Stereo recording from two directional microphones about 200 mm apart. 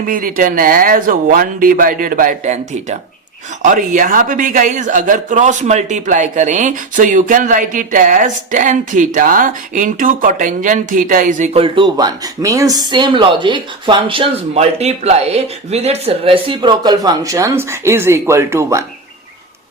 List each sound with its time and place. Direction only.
0.0 s a man's voice: 45° right (ahead or behind); by 18.9 s 15° right (ahead or behind)